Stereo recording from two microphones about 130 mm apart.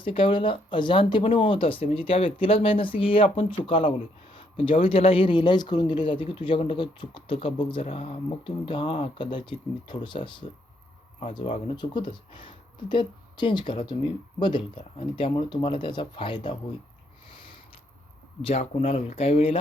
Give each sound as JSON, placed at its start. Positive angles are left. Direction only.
{"t": 0.0, "sound": "speech", "side_deg": 40}
{"t": 4.4, "sound": "a sound", "side_deg": 40}
{"t": 4.8, "sound": "speech", "side_deg": 45}
{"t": 18.4, "sound": "speech", "side_deg": 50}